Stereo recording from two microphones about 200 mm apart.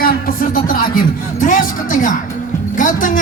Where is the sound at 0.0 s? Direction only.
45° left (ahead or behind).